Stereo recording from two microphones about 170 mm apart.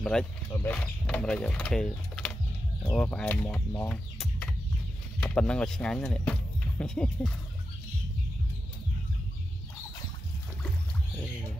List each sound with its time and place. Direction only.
0.0 s speech: 5° left (ahead or behind)
4.2 s chicken: 5° left (ahead or behind)
5.2 s speech: 5° left (ahead or behind)